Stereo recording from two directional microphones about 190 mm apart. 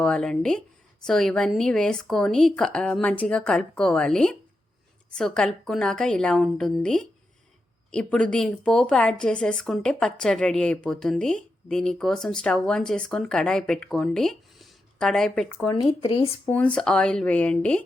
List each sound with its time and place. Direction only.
0.0 s speech: 5° left (ahead or behind)
15.7 s speech: 25° left (ahead or behind)
16.5 s speech: 5° left (ahead or behind)